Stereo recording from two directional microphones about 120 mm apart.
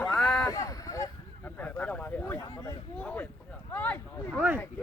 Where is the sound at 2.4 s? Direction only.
25° left (ahead or behind).